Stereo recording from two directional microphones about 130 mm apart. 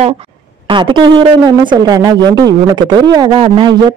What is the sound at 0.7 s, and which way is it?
Speech, 40° right (ahead or behind).